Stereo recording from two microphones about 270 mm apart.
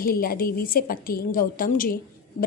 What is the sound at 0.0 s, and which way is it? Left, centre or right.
A woman's voice, left.